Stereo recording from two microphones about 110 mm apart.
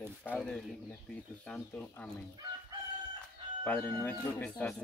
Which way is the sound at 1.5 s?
10° left (ahead or behind).